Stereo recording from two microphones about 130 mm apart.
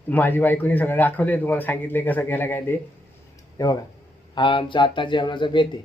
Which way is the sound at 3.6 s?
30° left (ahead or behind).